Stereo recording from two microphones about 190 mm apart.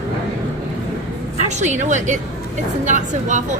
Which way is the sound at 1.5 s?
40° right (ahead or behind).